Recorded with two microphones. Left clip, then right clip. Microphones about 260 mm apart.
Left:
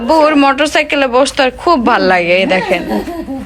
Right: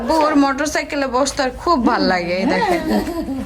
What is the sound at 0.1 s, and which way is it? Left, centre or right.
A woman's voice, centre.